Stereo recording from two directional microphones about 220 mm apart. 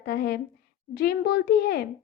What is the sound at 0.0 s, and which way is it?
A woman's voice, 45° left (ahead or behind).